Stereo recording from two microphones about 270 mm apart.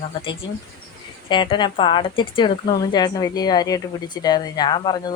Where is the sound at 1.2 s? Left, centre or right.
Centre.